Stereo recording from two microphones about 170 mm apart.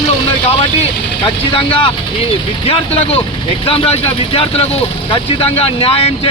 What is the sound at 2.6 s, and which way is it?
Speech, 35° left (ahead or behind).